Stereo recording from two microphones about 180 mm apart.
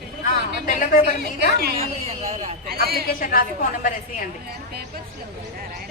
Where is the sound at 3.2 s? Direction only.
50° left (ahead or behind).